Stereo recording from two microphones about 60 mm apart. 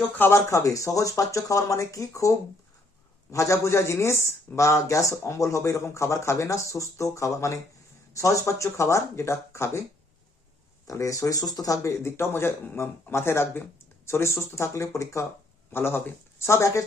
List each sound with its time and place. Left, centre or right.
0.3 s speech: left
3.3 s a man's voice: left
10.8 s speech: left
11.8 s a man's voice: left
15.7 s a man's voice: left